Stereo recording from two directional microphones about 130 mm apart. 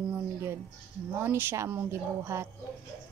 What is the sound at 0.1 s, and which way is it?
Music, 20° right (ahead or behind).